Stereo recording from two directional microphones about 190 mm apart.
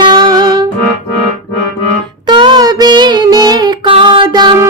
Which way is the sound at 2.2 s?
25° right (ahead or behind).